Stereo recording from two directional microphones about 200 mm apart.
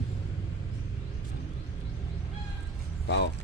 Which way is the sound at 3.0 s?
60° left (ahead or behind).